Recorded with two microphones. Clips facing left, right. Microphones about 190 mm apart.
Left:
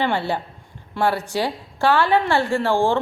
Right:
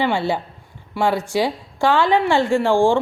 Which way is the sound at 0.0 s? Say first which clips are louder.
Right 2 dB; 15° right (ahead or behind).